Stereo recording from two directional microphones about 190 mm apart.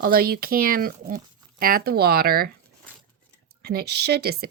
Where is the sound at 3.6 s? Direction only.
55° right (ahead or behind).